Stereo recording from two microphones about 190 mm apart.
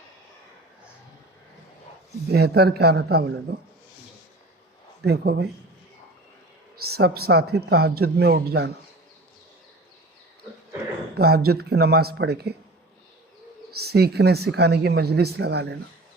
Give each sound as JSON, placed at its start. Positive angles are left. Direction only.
{"t": 2.3, "sound": "speech", "side_deg": -55}
{"t": 5.0, "sound": "speech", "side_deg": -60}
{"t": 6.9, "sound": "speech", "side_deg": -55}
{"t": 11.1, "sound": "speech", "side_deg": -55}
{"t": 13.7, "sound": "speech", "side_deg": -55}